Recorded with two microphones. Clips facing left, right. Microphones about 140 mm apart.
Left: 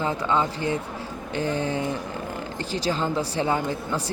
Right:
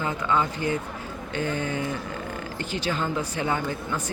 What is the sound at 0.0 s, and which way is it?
Speech, 30° left (ahead or behind).